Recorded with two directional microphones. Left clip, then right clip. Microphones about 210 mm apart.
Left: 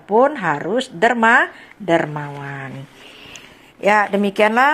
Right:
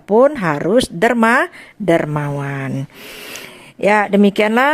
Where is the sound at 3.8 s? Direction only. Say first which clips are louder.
Right 2 dB; 40° right (ahead or behind).